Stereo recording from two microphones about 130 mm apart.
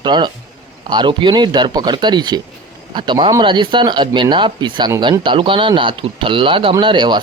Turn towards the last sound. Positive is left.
turn(degrees=-35)  # may be behind; listen again after turning